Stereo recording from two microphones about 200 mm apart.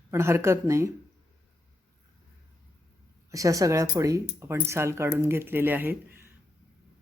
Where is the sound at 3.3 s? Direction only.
15° right (ahead or behind).